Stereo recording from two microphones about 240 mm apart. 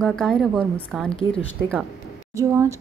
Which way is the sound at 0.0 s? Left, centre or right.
Centre.